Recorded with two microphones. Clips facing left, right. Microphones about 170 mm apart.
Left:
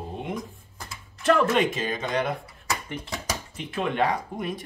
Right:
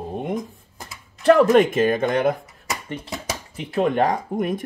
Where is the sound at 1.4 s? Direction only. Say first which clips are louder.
Right 8 dB; 50° right (ahead or behind).